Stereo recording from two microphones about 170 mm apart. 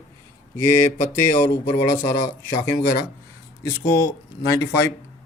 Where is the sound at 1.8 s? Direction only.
50° left (ahead or behind).